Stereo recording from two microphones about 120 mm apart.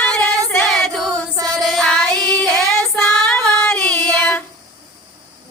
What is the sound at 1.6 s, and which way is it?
Child singing, centre (ahead or behind).